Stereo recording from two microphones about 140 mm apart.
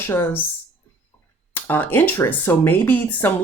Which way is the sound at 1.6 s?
15° left (ahead or behind).